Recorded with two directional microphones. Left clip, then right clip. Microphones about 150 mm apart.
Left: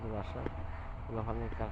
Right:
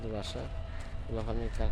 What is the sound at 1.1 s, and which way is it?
Speech, 15° right (ahead or behind).